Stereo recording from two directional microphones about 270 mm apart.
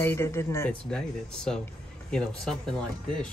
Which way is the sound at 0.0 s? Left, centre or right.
Centre.